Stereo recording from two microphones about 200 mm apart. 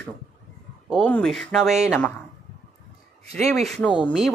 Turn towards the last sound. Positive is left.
turn(degrees=0)  # may be behind; listen again after turning